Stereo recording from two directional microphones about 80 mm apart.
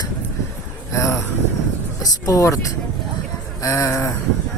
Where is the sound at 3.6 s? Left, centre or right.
Left.